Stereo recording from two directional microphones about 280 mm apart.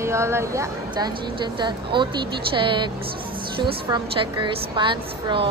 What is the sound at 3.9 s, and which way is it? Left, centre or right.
A woman's voice, centre.